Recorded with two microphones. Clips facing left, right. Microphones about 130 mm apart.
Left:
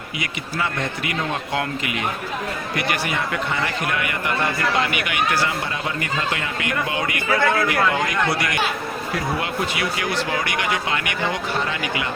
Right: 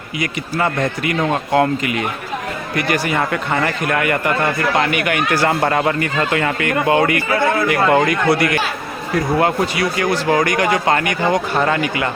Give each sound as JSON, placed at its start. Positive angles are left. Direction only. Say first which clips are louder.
{"t": 0.2, "sound": "speech", "louder": "right 7 dB", "side_deg": -45}
{"t": 9.4, "sound": "speech", "louder": "right 8 dB", "side_deg": -45}